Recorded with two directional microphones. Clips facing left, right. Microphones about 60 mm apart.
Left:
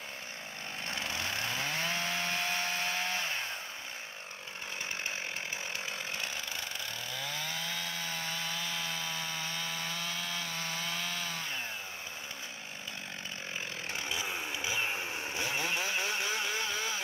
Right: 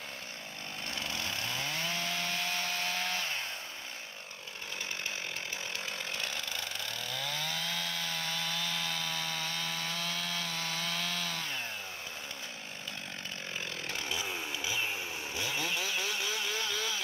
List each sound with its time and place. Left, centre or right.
0.8 s chainsaw: left
6.1 s chainsaw: centre
13.8 s chainsaw: centre
14.6 s vehicle: left